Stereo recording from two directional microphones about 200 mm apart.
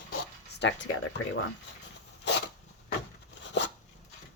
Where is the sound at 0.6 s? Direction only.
65° left (ahead or behind).